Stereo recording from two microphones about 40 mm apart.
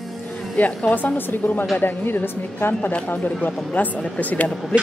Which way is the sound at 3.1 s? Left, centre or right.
Left.